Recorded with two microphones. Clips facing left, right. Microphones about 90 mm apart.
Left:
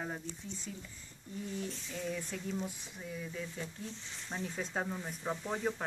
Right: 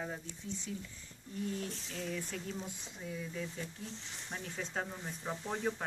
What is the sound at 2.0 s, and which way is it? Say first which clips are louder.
Speech: left 1 dB; 10° left (ahead or behind).